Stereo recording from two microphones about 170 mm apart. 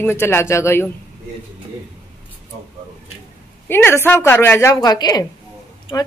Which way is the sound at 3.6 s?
15° left (ahead or behind).